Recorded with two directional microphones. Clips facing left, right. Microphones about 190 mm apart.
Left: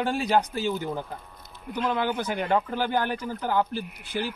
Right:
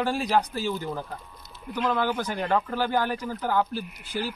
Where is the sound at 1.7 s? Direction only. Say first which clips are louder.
Right 1 dB; centre (ahead or behind).